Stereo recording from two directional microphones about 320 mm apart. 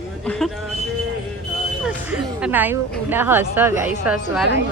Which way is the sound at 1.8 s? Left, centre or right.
Centre.